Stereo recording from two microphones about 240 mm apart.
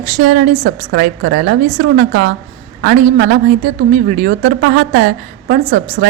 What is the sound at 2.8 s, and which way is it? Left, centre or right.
A woman's voice, right.